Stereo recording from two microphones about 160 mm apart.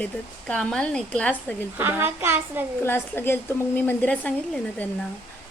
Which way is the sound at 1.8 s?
10° right (ahead or behind).